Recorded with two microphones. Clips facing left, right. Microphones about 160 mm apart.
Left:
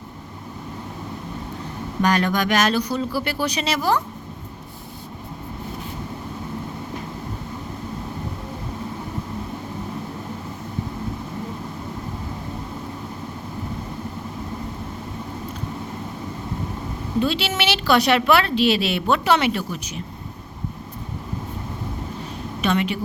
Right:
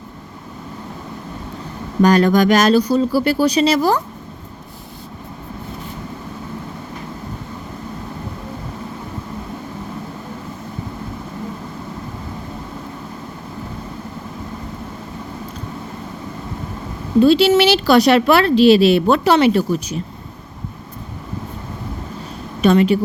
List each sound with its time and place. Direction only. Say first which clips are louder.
2.0 s speech: right 8 dB; 40° right (ahead or behind)
17.2 s speech: right 11 dB; 35° right (ahead or behind)
22.6 s speech: right 9 dB; 40° right (ahead or behind)